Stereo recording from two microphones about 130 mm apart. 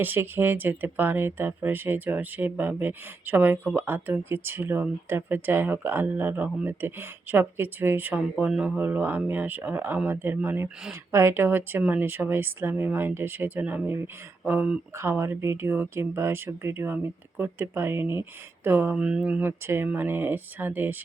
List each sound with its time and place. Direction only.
0.0 s speech: 15° right (ahead or behind)